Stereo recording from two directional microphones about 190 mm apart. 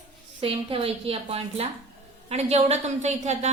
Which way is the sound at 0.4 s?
30° right (ahead or behind).